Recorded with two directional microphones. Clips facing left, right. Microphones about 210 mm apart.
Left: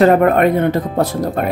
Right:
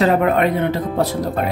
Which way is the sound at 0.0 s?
50° left (ahead or behind).